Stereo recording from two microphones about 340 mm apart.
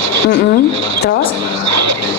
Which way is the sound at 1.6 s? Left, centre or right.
Right.